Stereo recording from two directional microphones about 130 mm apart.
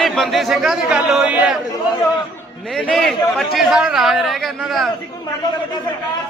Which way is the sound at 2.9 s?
Centre (ahead or behind).